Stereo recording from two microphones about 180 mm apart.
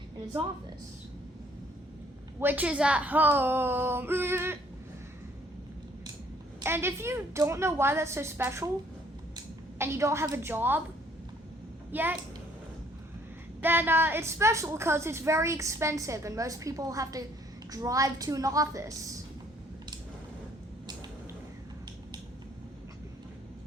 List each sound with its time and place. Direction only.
2.4 s a woman's voice: 10° right (ahead or behind)
6.6 s a woman's voice: 15° right (ahead or behind)
11.9 s a woman's voice: 10° right (ahead or behind)
13.6 s a woman's voice: 10° right (ahead or behind)